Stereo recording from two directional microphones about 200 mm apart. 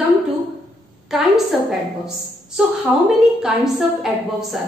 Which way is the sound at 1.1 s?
Centre (ahead or behind).